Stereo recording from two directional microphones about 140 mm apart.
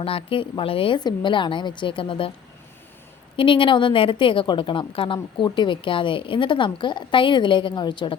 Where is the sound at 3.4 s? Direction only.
35° left (ahead or behind).